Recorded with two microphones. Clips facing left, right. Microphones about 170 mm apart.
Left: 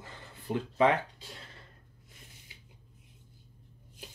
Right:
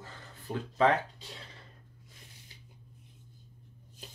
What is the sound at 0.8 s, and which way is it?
Speech, 15° left (ahead or behind).